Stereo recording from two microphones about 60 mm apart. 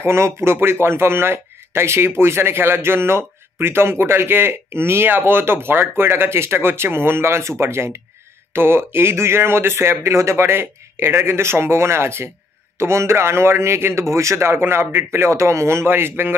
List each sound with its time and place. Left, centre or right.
0.0 s speech: right